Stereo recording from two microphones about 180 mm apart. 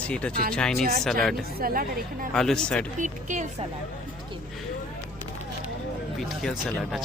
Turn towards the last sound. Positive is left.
turn(degrees=0)  # may be behind; listen again after turning